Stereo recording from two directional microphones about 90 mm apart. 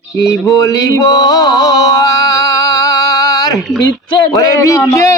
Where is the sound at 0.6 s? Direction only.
40° left (ahead or behind).